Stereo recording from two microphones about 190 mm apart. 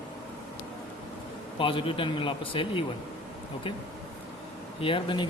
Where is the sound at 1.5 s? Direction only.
25° left (ahead or behind).